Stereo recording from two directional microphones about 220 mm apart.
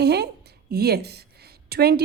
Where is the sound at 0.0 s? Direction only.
50° right (ahead or behind).